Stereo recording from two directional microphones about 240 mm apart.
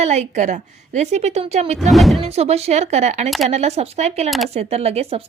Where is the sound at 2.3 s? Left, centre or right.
Right.